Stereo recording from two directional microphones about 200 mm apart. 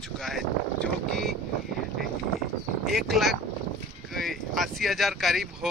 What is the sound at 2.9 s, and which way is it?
Speech, centre (ahead or behind).